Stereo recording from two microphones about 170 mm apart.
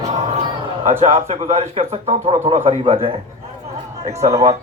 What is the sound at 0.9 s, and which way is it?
A man's voice, 40° right (ahead or behind).